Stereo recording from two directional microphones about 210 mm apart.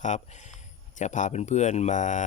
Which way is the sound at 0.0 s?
35° left (ahead or behind).